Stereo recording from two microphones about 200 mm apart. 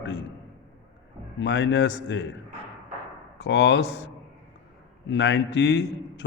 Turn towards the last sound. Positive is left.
turn(degrees=60)  # may be behind; listen again after turning